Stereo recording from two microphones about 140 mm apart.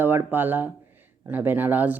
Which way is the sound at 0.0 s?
15° right (ahead or behind).